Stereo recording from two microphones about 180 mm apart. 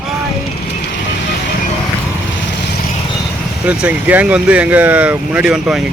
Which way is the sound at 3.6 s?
10° right (ahead or behind).